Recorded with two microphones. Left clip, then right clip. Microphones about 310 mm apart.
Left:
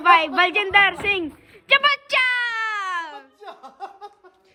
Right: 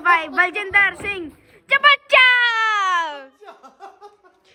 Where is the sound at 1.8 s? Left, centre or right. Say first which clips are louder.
Right 6 dB; centre.